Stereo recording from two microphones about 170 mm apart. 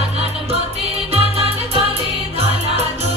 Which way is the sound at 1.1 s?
35° right (ahead or behind).